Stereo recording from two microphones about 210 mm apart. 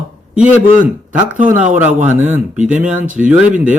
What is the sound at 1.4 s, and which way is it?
Speech, 35° right (ahead or behind).